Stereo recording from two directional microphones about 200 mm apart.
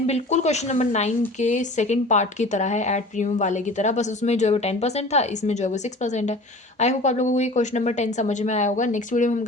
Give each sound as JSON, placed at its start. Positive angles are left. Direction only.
{"t": 0.1, "sound": "a woman's voice", "side_deg": 35}